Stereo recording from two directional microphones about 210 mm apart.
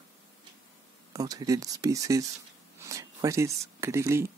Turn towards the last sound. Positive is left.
turn(degrees=-15)  # may be behind; listen again after turning